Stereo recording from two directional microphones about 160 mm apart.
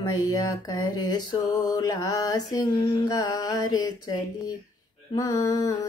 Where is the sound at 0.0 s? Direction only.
25° left (ahead or behind).